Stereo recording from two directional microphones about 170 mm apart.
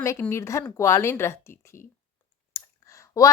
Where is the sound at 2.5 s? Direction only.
20° left (ahead or behind).